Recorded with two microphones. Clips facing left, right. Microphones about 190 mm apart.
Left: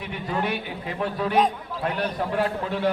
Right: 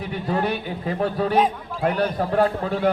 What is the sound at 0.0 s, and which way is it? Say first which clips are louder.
A man's voice: right 4 dB; 40° right (ahead or behind).